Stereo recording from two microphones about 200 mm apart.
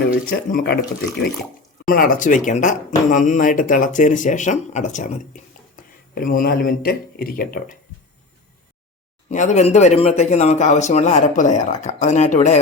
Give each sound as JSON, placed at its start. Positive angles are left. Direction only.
{"t": 0.0, "sound": "speech", "side_deg": 50}
{"t": 9.3, "sound": "speech", "side_deg": 35}